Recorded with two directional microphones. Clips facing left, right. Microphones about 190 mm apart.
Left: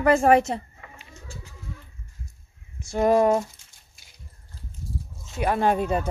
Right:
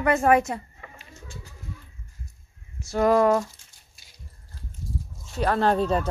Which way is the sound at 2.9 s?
20° left (ahead or behind).